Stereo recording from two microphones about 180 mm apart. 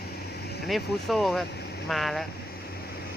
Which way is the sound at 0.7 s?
Centre (ahead or behind).